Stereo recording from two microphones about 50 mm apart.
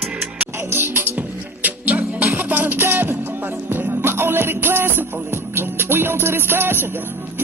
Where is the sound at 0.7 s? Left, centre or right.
Right.